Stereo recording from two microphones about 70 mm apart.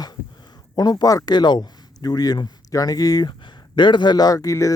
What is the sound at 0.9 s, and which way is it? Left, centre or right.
Speech, left.